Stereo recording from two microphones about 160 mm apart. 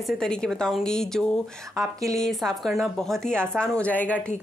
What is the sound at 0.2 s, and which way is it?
A woman's voice, 5° left (ahead or behind).